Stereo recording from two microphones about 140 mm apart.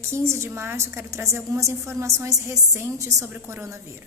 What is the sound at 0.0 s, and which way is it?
A woman's voice, 20° right (ahead or behind).